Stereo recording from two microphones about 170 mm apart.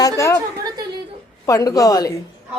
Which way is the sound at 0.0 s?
20° left (ahead or behind).